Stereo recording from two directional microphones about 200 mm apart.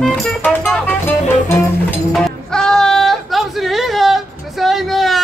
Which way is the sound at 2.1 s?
5° left (ahead or behind).